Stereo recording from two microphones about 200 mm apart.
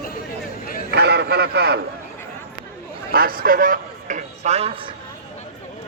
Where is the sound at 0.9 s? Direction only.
55° right (ahead or behind).